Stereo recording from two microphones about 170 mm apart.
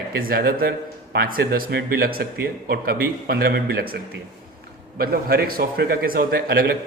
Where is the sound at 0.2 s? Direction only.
60° right (ahead or behind).